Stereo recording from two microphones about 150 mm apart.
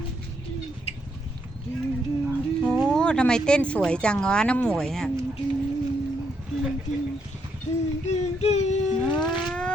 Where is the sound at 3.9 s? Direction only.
5° left (ahead or behind).